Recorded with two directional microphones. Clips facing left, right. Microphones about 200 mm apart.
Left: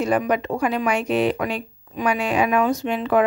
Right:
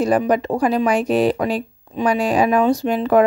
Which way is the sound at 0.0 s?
35° right (ahead or behind).